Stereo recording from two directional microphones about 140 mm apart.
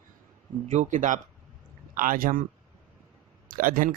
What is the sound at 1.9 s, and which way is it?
Speech, 80° right.